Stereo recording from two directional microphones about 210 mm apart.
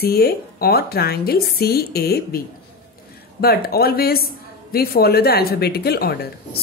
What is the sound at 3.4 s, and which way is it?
A woman's voice, 45° left (ahead or behind).